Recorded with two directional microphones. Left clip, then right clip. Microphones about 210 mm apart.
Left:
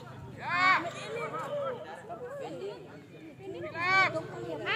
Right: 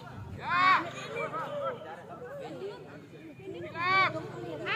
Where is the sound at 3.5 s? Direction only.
50° left (ahead or behind).